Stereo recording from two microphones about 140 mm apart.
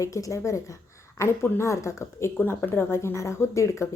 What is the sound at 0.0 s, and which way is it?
A woman's voice, 25° left (ahead or behind).